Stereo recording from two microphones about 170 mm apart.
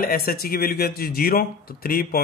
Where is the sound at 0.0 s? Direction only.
60° left (ahead or behind).